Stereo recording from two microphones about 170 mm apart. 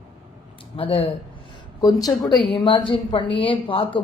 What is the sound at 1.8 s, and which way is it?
A man's voice, 20° left (ahead or behind).